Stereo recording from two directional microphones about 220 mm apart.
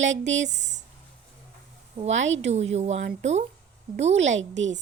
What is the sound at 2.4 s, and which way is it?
Speech, 30° right (ahead or behind).